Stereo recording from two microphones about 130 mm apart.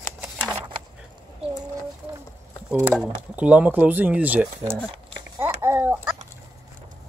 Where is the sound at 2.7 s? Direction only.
10° right (ahead or behind).